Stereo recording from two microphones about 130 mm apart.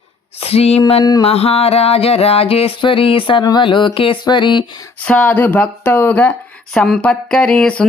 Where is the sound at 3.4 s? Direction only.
35° left (ahead or behind).